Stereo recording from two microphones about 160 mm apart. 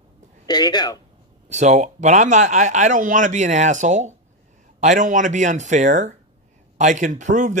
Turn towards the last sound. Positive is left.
turn(degrees=-50)  # may be behind; listen again after turning